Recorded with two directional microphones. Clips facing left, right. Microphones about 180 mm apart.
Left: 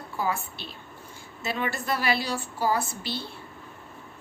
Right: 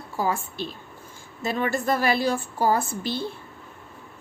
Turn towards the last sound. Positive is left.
turn(degrees=-50)  # may be behind; listen again after turning